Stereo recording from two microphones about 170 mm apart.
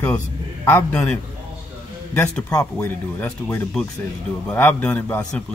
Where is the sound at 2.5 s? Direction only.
20° left (ahead or behind).